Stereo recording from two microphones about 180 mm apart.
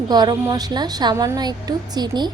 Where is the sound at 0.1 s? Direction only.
25° right (ahead or behind).